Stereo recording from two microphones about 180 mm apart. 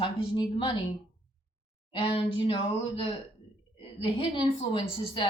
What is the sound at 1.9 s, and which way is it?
A woman's voice, 25° left (ahead or behind).